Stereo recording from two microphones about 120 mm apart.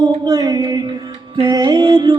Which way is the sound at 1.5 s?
35° right (ahead or behind).